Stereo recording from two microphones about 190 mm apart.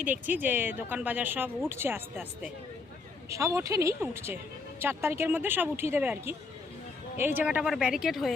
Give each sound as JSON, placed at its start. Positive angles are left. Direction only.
{"t": 0.0, "sound": "a woman's voice", "side_deg": -10}